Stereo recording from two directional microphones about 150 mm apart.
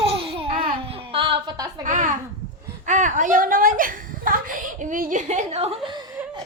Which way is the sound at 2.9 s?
55° right (ahead or behind).